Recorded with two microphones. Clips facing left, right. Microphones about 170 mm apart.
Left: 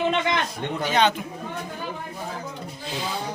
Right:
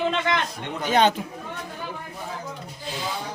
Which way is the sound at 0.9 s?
45° right (ahead or behind).